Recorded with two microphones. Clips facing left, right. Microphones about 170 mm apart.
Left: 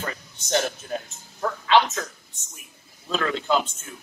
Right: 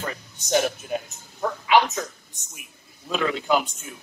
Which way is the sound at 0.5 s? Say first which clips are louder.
Right 2 dB; 10° right (ahead or behind).